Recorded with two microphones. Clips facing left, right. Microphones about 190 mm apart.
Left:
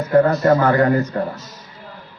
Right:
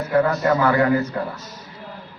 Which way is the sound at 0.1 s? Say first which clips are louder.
Left 5 dB; 40° left (ahead or behind).